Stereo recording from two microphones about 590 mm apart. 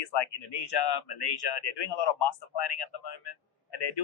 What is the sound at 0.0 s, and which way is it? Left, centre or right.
Speech, left.